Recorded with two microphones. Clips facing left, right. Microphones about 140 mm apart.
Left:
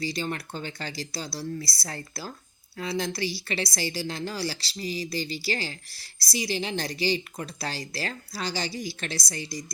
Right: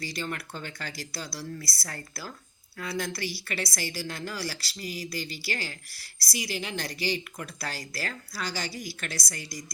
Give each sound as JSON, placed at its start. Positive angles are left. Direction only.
{"t": 0.0, "sound": "a woman's voice", "side_deg": 25}